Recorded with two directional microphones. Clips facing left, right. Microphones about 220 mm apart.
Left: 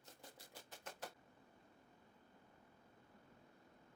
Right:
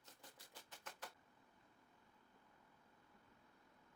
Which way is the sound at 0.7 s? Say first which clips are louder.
Left 5 dB; 25° left (ahead or behind).